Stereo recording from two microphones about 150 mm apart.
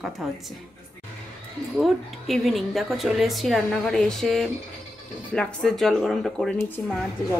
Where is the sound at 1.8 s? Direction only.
Centre (ahead or behind).